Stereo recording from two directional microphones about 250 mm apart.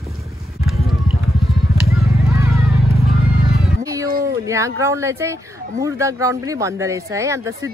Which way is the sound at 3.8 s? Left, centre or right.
Centre.